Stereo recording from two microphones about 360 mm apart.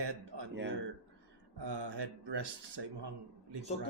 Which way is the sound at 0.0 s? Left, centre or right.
Right.